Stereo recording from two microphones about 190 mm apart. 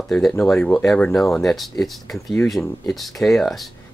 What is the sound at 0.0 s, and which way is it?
Speech, centre (ahead or behind).